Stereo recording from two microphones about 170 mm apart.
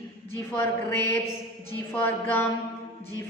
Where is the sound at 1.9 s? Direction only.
10° left (ahead or behind).